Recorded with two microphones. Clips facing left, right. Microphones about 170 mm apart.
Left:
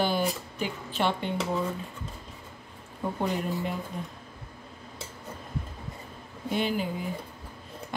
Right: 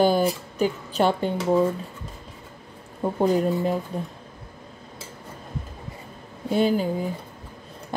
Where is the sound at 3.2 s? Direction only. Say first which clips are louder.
Right 10 dB; 35° right (ahead or behind).